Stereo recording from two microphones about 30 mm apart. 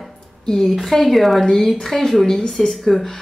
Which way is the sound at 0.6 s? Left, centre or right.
Centre.